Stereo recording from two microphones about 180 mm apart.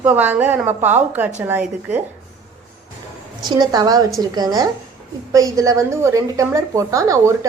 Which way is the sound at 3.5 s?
20° right (ahead or behind).